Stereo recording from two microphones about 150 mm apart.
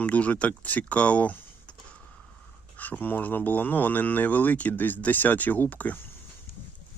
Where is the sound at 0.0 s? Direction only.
10° left (ahead or behind).